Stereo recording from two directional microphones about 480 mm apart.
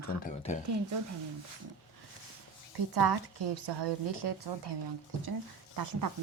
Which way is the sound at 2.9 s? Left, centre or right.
Right.